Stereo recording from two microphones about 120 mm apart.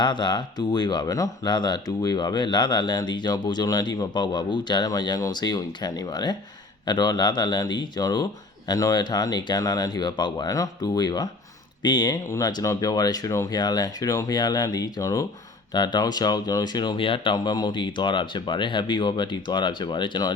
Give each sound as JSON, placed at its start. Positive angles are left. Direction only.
{"t": 0.0, "sound": "speech", "side_deg": 40}